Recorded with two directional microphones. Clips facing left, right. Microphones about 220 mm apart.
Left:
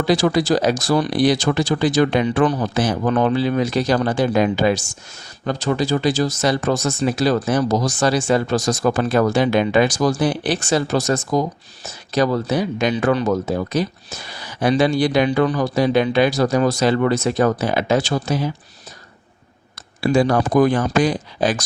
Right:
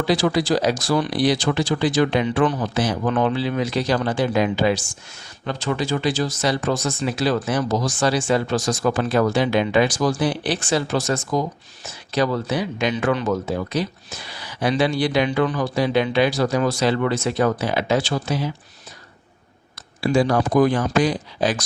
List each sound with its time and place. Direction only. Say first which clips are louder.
0.1 s speech: left 3 dB; 45° left (ahead or behind)
20.0 s speech: left 2 dB; 50° left (ahead or behind)